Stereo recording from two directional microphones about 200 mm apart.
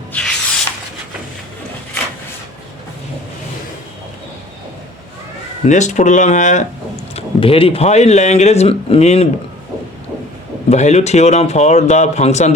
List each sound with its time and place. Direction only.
0.1 s rub: 5° left (ahead or behind)
5.6 s speech: 35° left (ahead or behind)
7.2 s speech: 25° left (ahead or behind)
10.7 s speech: 35° left (ahead or behind)